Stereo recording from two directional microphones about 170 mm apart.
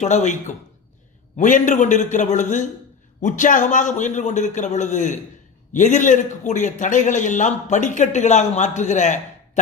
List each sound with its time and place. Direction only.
0.0 s a man's voice: 45° left (ahead or behind)